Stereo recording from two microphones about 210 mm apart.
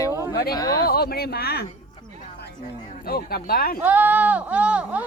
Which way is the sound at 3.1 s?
45° left (ahead or behind).